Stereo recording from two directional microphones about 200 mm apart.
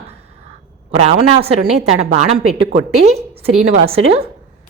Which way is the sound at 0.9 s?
30° right (ahead or behind).